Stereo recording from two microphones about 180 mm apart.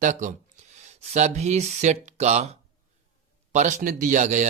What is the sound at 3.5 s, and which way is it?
Speech, 40° right (ahead or behind).